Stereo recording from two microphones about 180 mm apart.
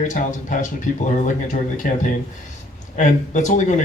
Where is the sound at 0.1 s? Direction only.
45° left (ahead or behind).